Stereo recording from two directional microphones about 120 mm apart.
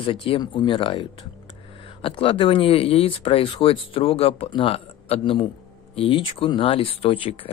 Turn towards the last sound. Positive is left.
turn(degrees=50)  # may be behind; listen again after turning